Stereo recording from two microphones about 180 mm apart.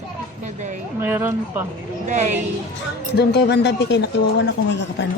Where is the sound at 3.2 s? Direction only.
70° left (ahead or behind).